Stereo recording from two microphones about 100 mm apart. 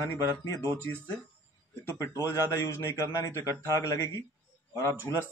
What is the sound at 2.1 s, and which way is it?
A man's voice, 30° left (ahead or behind).